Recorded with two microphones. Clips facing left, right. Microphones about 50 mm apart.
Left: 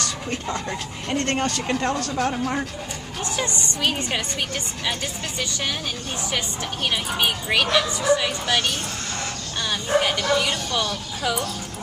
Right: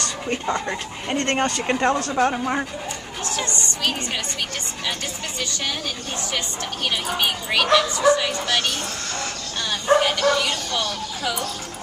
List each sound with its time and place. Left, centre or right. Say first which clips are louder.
0.3 s speech: right 6 dB; centre
3.3 s a woman's voice: even; centre
6.3 s speech: left 1 dB; centre